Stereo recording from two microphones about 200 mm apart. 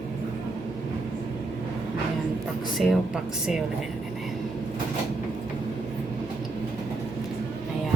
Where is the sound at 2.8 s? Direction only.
Centre (ahead or behind).